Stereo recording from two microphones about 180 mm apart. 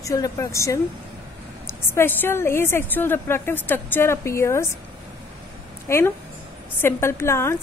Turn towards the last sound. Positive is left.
turn(degrees=15)  # may be behind; listen again after turning